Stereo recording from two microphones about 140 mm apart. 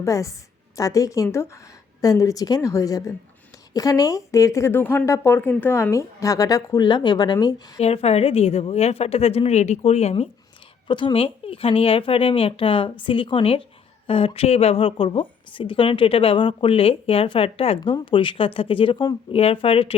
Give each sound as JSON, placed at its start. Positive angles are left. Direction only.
{"t": 0.0, "sound": "speech", "side_deg": 20}
{"t": 7.8, "sound": "a woman's voice", "side_deg": 45}
{"t": 10.8, "sound": "a woman's voice", "side_deg": 35}